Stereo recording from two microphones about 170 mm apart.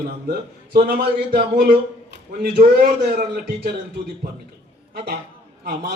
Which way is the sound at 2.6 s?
70° right (ahead or behind).